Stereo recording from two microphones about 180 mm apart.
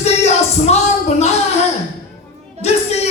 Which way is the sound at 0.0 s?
35° left (ahead or behind).